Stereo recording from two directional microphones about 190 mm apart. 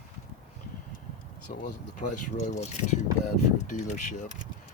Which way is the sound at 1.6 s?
40° left (ahead or behind).